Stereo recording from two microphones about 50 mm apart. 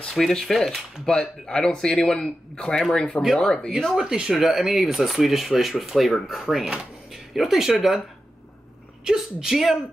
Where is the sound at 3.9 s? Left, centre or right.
Centre.